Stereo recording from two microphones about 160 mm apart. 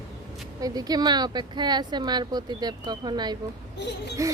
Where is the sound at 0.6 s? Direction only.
25° right (ahead or behind).